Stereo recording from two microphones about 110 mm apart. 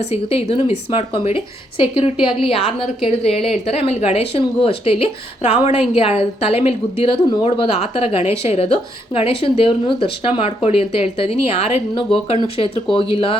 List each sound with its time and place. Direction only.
0.0 s speech: 70° left (ahead or behind)
2.4 s speech: 55° left (ahead or behind)
5.4 s a woman's voice: 80° left
5.9 s speech: 65° left (ahead or behind)